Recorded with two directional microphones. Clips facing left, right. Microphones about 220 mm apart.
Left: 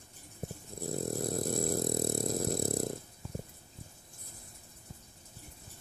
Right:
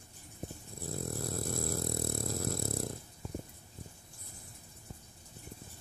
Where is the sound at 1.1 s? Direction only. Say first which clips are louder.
Left 5 dB; 20° left (ahead or behind).